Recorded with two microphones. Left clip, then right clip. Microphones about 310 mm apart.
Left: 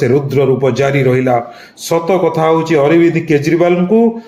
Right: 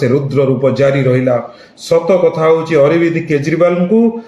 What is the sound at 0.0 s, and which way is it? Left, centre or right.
Speech, centre.